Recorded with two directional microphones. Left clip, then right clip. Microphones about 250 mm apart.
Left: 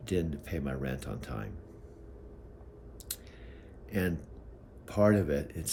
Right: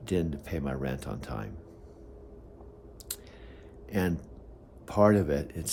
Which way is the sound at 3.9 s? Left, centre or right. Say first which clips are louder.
Right 2 dB; centre.